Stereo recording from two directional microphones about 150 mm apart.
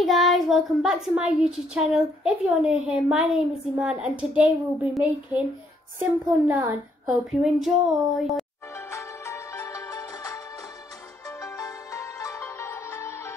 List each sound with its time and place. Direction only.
0.0 s a child's voice: centre (ahead or behind)
7.1 s a child's voice: centre (ahead or behind)
8.7 s music: 20° left (ahead or behind)
11.4 s music: 20° left (ahead or behind)